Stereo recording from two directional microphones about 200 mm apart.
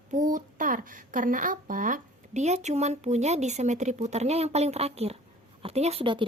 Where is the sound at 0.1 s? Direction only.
40° right (ahead or behind).